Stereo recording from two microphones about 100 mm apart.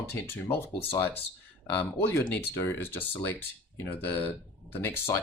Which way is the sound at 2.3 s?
20° left (ahead or behind).